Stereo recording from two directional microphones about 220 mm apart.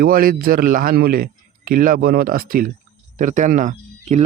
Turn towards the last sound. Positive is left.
turn(degrees=-35)  # may be behind; listen again after turning